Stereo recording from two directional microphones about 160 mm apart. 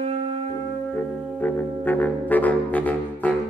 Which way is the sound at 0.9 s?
10° left (ahead or behind).